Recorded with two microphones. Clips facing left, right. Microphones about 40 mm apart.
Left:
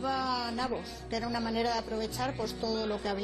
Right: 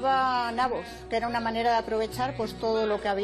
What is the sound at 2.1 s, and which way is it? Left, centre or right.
Speech, centre.